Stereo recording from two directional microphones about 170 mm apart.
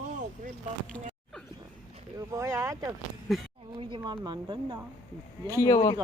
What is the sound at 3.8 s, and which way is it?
Speech, 30° right (ahead or behind).